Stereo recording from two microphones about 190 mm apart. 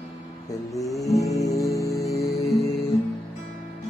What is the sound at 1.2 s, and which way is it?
Music, 15° left (ahead or behind).